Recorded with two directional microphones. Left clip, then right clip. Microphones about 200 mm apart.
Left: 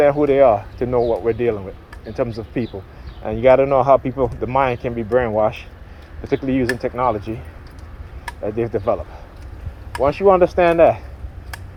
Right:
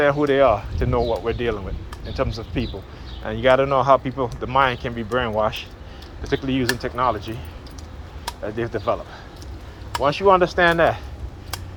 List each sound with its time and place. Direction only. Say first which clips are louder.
0.0 s speech: left 4 dB; 40° left (ahead or behind)
8.4 s speech: left 5 dB; 45° left (ahead or behind)
10.0 s speech: left 3 dB; 40° left (ahead or behind)